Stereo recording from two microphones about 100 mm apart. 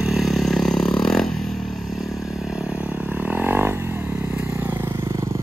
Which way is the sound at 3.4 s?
20° right (ahead or behind).